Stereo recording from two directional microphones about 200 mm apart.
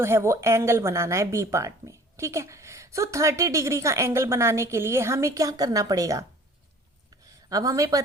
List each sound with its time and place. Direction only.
0.0 s a woman's voice: 10° right (ahead or behind)
7.5 s a woman's voice: 15° right (ahead or behind)